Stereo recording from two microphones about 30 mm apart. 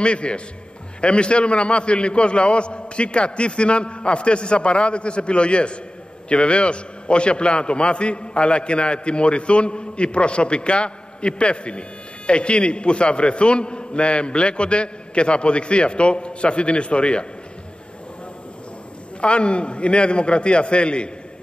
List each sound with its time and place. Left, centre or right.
0.0 s a man's voice: left
19.2 s a man's voice: left